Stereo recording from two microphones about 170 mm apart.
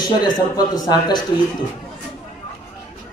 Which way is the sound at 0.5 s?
20° left (ahead or behind).